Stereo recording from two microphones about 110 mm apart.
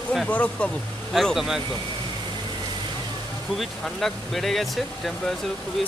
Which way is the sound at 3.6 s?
Centre (ahead or behind).